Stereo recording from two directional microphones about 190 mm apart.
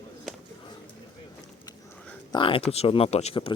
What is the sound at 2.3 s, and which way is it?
Speech, 25° left (ahead or behind).